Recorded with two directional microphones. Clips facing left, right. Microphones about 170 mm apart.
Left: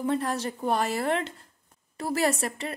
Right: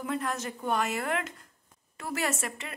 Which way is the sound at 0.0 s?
35° left (ahead or behind).